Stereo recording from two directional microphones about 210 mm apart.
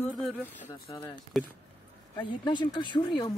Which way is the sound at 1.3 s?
Centre (ahead or behind).